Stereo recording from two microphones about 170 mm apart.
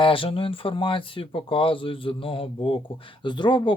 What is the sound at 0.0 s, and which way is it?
Speech, 30° left (ahead or behind).